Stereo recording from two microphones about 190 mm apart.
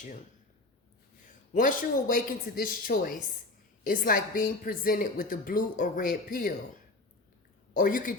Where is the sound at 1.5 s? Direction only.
45° left (ahead or behind).